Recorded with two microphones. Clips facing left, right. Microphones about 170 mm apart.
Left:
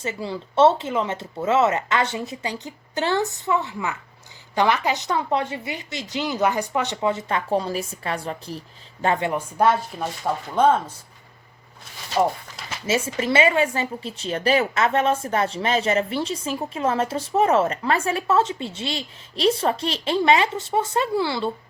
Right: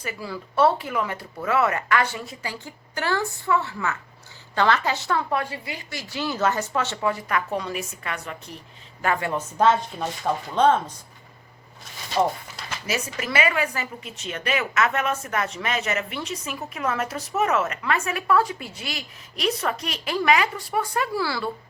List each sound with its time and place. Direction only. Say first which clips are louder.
0.0 s speech: left 4 dB; 25° left (ahead or behind)
9.3 s speech: even; 10° left (ahead or behind)
12.8 s speech: left 6 dB; 25° left (ahead or behind)